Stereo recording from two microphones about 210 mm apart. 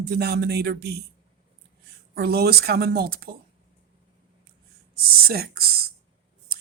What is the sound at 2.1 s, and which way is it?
Speech, 50° right (ahead or behind).